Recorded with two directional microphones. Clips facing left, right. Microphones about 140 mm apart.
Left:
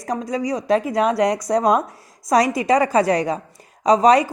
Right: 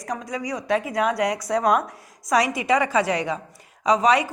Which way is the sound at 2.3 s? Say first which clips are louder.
Left 4 dB; 40° left (ahead or behind).